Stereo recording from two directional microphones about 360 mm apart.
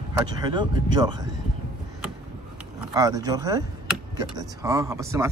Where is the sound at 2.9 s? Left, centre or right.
Centre.